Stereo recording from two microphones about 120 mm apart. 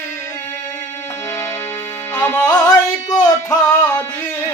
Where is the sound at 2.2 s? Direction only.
20° left (ahead or behind).